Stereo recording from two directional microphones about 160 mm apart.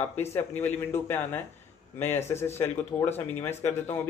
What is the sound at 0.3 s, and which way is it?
Speech, 10° left (ahead or behind).